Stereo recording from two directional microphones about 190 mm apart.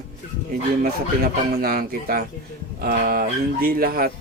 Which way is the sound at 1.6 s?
50° right (ahead or behind).